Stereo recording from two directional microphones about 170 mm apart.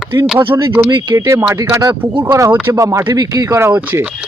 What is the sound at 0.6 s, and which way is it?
Speech, 20° right (ahead or behind).